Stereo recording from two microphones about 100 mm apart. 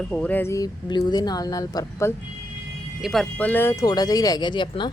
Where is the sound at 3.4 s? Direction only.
15° left (ahead or behind).